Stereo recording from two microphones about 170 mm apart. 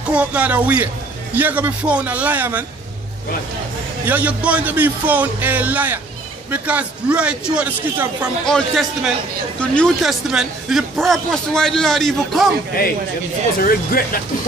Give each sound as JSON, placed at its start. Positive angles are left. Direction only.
{"t": 0.1, "sound": "speech", "side_deg": -10}
{"t": 4.0, "sound": "speech", "side_deg": -10}
{"t": 8.5, "sound": "speech", "side_deg": 0}
{"t": 13.7, "sound": "speech", "side_deg": 60}